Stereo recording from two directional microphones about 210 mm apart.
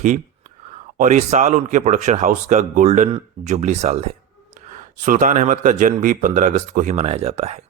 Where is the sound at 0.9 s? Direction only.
35° right (ahead or behind).